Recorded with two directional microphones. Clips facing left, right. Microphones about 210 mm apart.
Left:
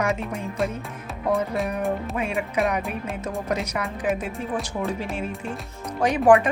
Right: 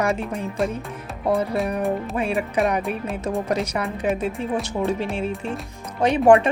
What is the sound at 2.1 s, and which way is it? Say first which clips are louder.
Music: right 3 dB; 30° right (ahead or behind).